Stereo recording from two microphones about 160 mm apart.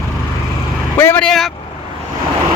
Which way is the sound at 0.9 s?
15° left (ahead or behind).